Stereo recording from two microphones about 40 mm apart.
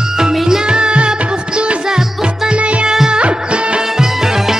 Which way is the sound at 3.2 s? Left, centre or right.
Right.